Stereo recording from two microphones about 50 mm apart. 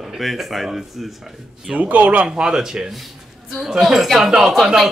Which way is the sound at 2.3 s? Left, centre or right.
Centre.